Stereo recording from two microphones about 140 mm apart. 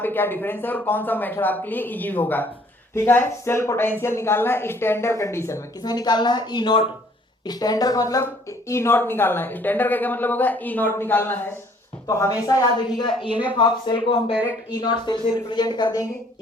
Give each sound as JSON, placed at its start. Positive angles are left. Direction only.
{"t": 0.0, "sound": "a woman's voice", "side_deg": 15}